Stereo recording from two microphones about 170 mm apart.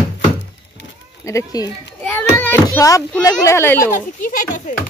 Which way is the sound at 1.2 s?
20° left (ahead or behind).